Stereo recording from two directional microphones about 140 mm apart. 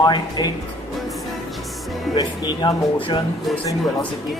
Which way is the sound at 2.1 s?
30° left (ahead or behind).